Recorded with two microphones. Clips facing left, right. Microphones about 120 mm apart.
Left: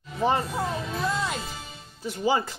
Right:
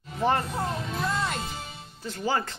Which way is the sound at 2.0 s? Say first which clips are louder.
Left 3 dB; 15° left (ahead or behind).